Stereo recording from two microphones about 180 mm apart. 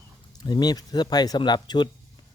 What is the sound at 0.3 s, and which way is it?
Speech, 20° left (ahead or behind).